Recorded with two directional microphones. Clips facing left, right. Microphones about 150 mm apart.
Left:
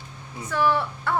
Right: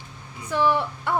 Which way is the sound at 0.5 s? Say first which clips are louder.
Right 1 dB; 15° right (ahead or behind).